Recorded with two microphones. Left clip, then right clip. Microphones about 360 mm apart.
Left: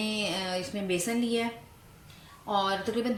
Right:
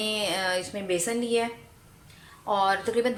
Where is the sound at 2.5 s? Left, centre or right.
Centre.